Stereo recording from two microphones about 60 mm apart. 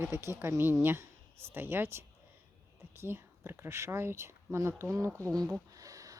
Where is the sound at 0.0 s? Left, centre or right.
Right.